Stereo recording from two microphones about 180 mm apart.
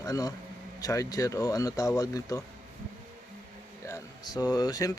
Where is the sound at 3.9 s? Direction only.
20° left (ahead or behind).